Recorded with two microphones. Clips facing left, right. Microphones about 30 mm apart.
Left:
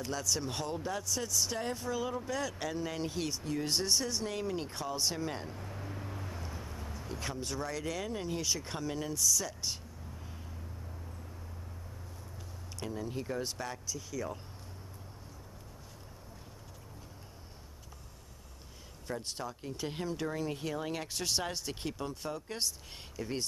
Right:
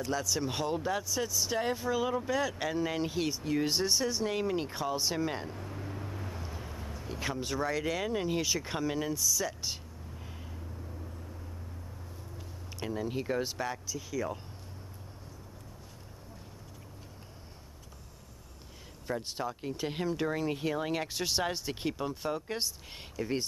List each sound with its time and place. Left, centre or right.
0.0 s speech: centre
12.9 s speech: right
13.4 s speech: centre
19.0 s speech: centre